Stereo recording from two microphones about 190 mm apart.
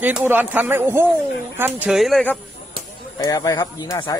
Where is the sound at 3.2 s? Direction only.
20° left (ahead or behind).